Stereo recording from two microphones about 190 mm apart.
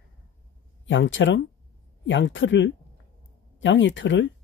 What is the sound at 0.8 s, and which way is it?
Speech, 80° left.